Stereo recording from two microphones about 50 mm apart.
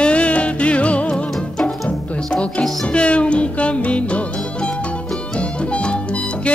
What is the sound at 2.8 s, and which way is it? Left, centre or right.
Music, left.